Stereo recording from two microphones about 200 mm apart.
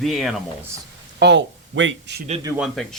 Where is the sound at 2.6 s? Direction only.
Centre (ahead or behind).